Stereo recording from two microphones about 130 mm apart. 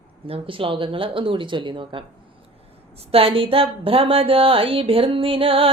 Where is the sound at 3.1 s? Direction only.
45° right (ahead or behind).